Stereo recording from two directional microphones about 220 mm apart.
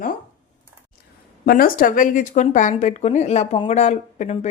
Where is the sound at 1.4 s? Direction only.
40° left (ahead or behind).